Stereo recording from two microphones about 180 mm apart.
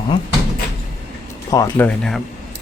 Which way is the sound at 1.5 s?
15° left (ahead or behind).